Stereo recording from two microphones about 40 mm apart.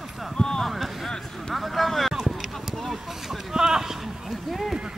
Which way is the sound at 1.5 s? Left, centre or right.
Centre.